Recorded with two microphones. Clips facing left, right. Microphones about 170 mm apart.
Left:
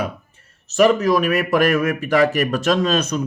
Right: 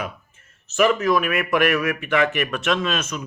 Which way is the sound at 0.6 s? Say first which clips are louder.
Left 4 dB; 35° left (ahead or behind).